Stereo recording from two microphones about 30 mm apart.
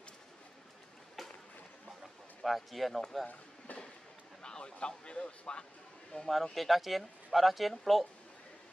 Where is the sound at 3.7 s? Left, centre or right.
Left.